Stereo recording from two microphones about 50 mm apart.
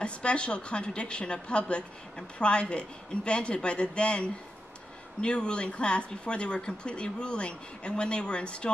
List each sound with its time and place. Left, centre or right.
0.0 s a woman's voice: left